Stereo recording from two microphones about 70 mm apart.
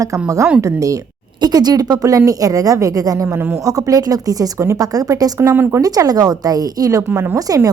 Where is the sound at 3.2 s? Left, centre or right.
Right.